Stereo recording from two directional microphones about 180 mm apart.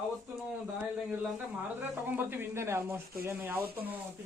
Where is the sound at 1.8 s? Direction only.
10° right (ahead or behind).